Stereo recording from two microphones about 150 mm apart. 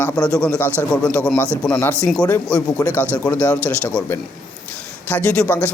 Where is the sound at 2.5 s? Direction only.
10° left (ahead or behind).